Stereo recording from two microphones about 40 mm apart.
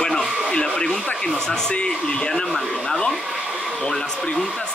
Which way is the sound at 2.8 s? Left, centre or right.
Left.